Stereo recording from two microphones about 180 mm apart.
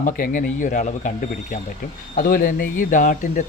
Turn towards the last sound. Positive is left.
turn(degrees=45)  # may be behind; listen again after turning